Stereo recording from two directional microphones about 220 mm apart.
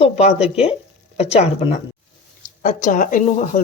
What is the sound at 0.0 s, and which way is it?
Speech, 30° left (ahead or behind).